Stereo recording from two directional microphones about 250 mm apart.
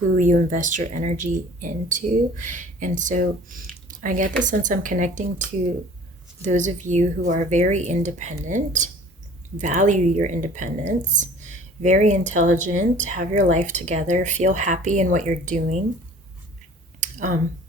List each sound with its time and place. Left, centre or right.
0.2 s speech: right
6.4 s speech: right
17.0 s a sound: right